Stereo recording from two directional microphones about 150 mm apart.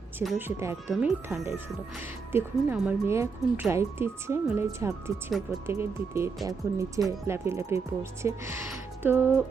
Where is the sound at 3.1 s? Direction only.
20° right (ahead or behind).